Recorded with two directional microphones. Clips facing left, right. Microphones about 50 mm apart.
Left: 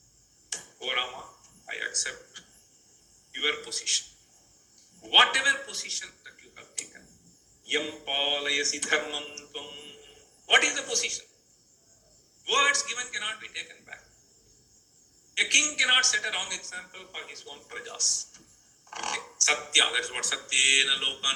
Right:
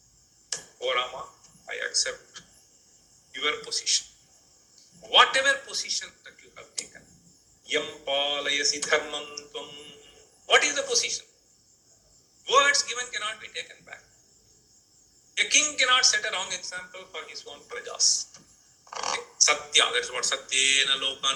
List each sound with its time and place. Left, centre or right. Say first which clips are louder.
0.5 s tick-tock: right 4 dB; left
1.6 s a sound: right 2 dB; centre
3.3 s a man's voice: right 1 dB; centre
5.0 s a man's voice: right 2 dB; centre
6.9 s tick-tock: right 1 dB; centre
7.7 s a man's voice: right 2 dB; centre
12.5 s a man's voice: right 4 dB; centre
15.4 s a man's voice: even; centre